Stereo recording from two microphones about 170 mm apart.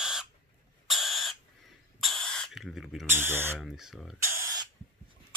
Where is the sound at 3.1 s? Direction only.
15° right (ahead or behind).